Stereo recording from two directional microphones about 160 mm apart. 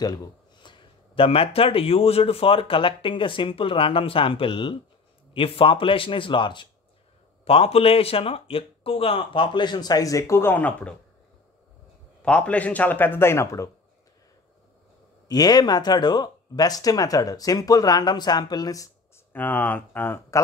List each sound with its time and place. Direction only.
0.0 s speech: 25° left (ahead or behind); by 11.0 s 10° left (ahead or behind)
12.2 s a man's voice: 5° left (ahead or behind)
15.2 s speech: 25° left (ahead or behind)
19.3 s a man's voice: 10° left (ahead or behind)